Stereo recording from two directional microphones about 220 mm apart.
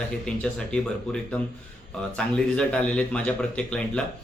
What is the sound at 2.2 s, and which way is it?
Speech, 5° left (ahead or behind).